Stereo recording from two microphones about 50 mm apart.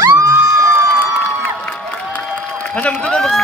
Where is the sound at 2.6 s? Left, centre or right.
Left.